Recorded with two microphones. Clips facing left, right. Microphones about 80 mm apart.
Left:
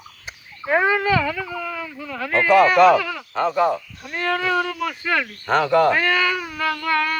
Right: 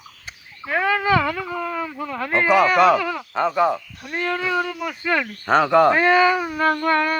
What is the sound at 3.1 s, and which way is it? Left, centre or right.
Speech, right.